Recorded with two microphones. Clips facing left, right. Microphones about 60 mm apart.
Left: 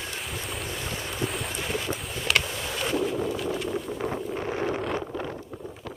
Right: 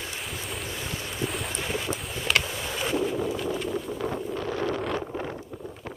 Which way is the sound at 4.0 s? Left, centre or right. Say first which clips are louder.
Even; left.